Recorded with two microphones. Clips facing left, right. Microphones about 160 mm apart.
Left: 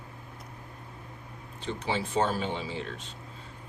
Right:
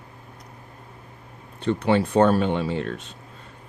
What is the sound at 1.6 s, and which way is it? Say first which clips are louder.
Speech: right 11 dB; 60° right (ahead or behind).